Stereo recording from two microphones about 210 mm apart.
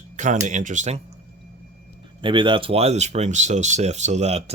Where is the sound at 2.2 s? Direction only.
25° right (ahead or behind).